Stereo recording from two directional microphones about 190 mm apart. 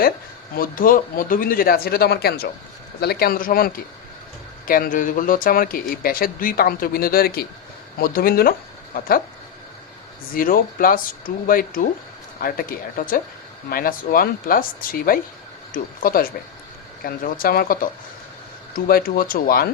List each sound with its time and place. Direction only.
0.5 s speech: 50° left (ahead or behind)
10.3 s speech: 50° left (ahead or behind)